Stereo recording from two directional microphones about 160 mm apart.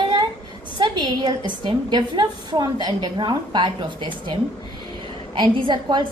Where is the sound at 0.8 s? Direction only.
30° right (ahead or behind).